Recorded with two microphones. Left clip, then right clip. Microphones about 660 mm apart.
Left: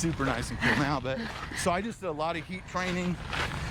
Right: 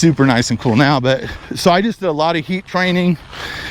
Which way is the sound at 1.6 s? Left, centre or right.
Right.